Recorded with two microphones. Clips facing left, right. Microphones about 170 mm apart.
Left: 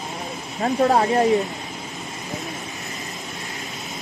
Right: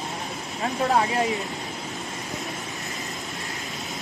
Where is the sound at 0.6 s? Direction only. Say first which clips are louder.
Left 5 dB; 40° left (ahead or behind).